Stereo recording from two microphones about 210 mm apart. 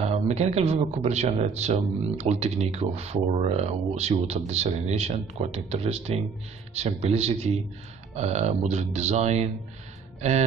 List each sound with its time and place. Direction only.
0.1 s speech: 30° right (ahead or behind)